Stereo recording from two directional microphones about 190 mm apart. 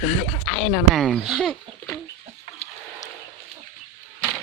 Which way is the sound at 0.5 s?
Centre (ahead or behind).